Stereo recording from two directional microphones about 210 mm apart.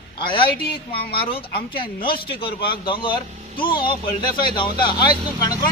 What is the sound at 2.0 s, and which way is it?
A man's voice, 25° left (ahead or behind).